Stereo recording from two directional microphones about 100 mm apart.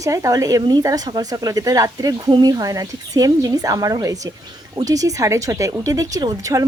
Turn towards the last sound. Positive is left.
turn(degrees=-35)  # may be behind; listen again after turning